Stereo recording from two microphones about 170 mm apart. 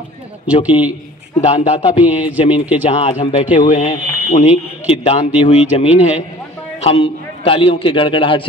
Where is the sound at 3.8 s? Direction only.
35° left (ahead or behind).